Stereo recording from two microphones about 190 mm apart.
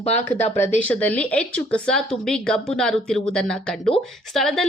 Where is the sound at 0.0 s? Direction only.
35° left (ahead or behind).